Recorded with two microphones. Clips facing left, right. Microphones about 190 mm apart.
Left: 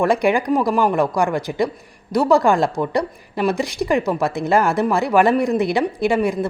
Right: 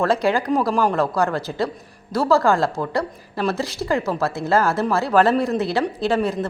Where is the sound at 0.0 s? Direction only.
15° left (ahead or behind).